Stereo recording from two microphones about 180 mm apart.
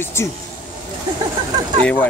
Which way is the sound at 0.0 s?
15° left (ahead or behind).